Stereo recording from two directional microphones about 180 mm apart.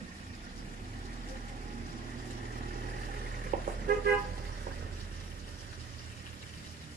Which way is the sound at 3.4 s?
55° right (ahead or behind).